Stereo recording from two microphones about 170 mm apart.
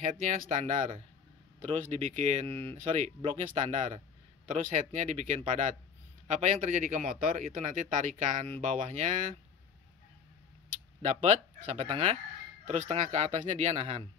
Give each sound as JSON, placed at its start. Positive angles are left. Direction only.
{"t": 0.0, "sound": "a man's voice", "side_deg": -45}
{"t": 11.0, "sound": "a man's voice", "side_deg": -45}